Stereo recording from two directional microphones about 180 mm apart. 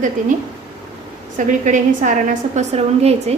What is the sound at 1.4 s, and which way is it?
A woman's voice, 45° right (ahead or behind).